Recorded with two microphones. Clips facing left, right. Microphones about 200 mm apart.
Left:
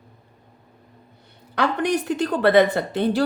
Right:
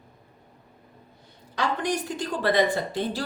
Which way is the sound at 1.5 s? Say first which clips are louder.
Left 5 dB; 60° left (ahead or behind).